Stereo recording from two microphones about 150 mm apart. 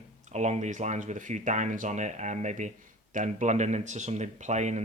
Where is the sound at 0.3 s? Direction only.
50° right (ahead or behind).